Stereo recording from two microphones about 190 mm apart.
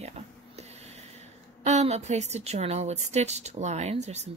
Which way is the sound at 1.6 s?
35° right (ahead or behind).